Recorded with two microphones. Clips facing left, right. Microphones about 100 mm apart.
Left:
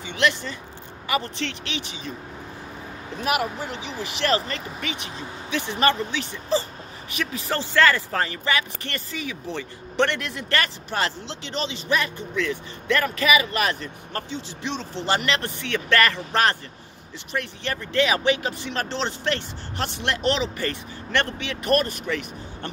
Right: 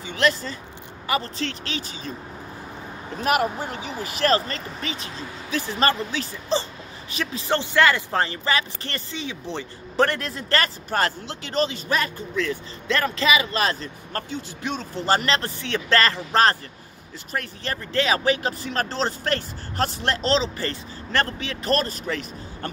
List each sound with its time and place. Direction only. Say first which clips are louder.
0.0 s speech: right 1 dB; 40° right (ahead or behind)
3.2 s speech: right 3 dB; 40° right (ahead or behind)
14.3 s speech: right 1 dB; 45° right (ahead or behind)